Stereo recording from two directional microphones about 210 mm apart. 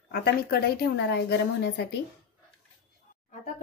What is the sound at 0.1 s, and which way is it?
A woman's voice, 45° left (ahead or behind).